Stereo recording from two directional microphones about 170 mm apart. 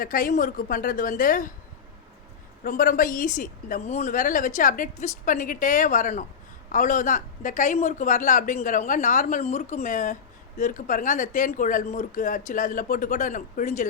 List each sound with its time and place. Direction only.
0.0 s a woman's voice: 55° left (ahead or behind)
2.6 s a woman's voice: 55° left (ahead or behind)